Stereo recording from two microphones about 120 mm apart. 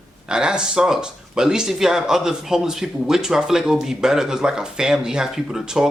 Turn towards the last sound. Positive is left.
turn(degrees=-5)  # may be behind; listen again after turning